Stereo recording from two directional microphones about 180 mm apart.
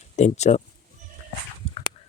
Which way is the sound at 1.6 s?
35° left (ahead or behind).